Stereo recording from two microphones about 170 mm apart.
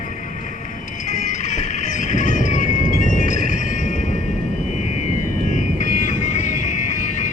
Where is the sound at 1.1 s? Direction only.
45° left (ahead or behind).